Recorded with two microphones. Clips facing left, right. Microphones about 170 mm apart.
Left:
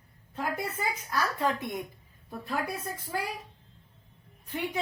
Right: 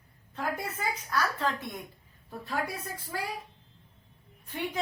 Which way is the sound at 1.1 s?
20° left (ahead or behind).